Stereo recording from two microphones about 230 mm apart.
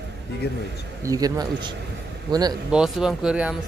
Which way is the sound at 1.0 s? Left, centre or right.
Centre.